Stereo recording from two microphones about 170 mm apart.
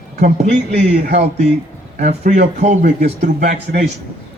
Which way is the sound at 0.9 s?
40° right (ahead or behind).